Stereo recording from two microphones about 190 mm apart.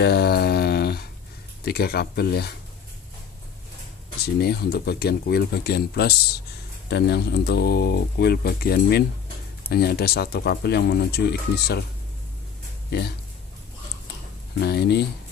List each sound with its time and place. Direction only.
0.0 s a sound: 60° left (ahead or behind)
1.6 s speech: 55° left (ahead or behind)
4.2 s speech: 60° left (ahead or behind)
14.6 s speech: 60° left (ahead or behind)